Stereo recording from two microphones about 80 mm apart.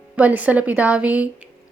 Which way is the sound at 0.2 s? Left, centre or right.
Centre.